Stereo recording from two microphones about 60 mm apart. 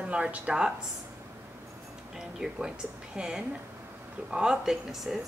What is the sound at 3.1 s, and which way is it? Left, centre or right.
A woman's voice, centre.